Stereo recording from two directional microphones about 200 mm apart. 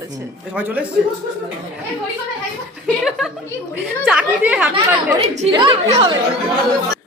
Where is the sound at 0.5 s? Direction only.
10° right (ahead or behind).